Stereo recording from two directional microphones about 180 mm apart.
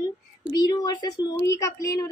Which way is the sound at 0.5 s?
20° left (ahead or behind).